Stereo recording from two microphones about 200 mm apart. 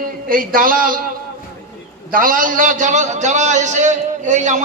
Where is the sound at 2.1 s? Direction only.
45° right (ahead or behind).